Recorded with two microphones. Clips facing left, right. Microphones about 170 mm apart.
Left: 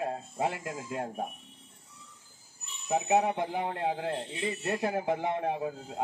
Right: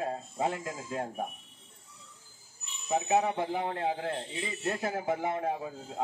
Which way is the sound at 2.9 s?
15° left (ahead or behind).